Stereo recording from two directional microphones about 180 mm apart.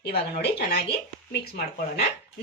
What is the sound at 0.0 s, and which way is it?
Speech, 60° left (ahead or behind).